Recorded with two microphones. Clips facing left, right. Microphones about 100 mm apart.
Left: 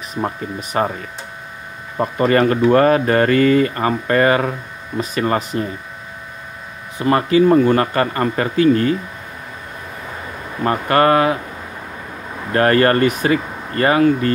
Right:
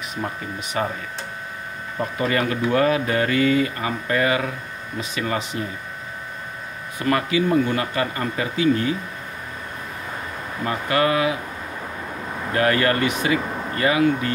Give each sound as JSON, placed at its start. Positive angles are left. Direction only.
{"t": 0.0, "sound": "speech", "side_deg": 40}
{"t": 2.0, "sound": "speech", "side_deg": 45}
{"t": 7.0, "sound": "speech", "side_deg": 30}
{"t": 7.2, "sound": "speech", "side_deg": 40}
{"t": 10.6, "sound": "speech", "side_deg": 50}
{"t": 12.5, "sound": "speech", "side_deg": 45}